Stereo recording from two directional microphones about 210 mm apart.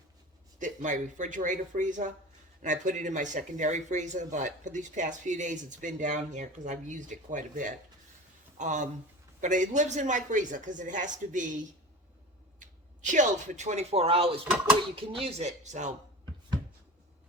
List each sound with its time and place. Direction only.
0.6 s speech: 35° right (ahead or behind)